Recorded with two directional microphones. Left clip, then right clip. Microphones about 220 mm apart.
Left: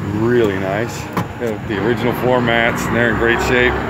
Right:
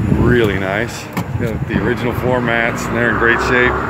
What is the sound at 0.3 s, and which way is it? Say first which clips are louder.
Speech: even; 10° right (ahead or behind).